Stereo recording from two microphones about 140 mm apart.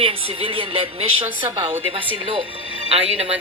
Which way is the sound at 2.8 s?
45° right (ahead or behind).